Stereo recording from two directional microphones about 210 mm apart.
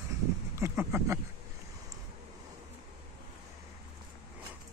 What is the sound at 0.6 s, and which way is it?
Speech, 15° right (ahead or behind).